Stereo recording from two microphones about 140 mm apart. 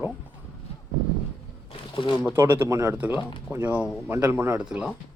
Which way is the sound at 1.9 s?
35° left (ahead or behind).